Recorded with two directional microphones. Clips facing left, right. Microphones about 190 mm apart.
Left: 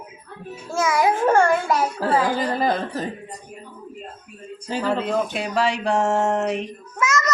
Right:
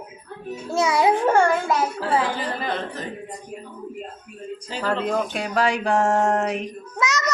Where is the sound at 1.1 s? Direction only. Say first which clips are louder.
Left 1 dB; 15° right (ahead or behind).